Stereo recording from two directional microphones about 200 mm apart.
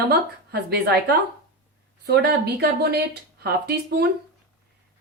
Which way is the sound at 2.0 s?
55° right (ahead or behind).